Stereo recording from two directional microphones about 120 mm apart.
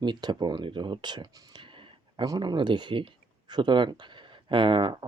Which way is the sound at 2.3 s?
40° right (ahead or behind).